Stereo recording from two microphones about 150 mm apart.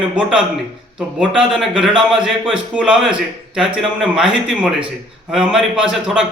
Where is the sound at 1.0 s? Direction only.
5° right (ahead or behind).